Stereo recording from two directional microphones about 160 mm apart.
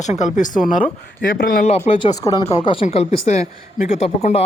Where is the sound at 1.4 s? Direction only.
65° left (ahead or behind).